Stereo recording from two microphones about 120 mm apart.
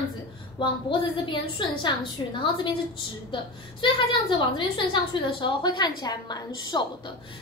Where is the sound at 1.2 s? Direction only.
40° left (ahead or behind).